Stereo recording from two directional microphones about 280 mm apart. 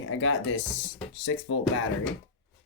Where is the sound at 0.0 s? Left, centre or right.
Left.